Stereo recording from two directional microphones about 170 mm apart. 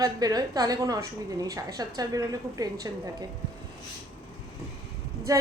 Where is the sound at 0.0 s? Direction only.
20° right (ahead or behind).